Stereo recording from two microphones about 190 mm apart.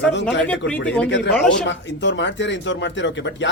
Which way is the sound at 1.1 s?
70° left (ahead or behind).